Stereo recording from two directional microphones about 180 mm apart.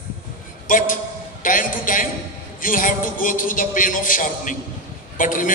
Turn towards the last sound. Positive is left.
turn(degrees=50)  # may be behind; listen again after turning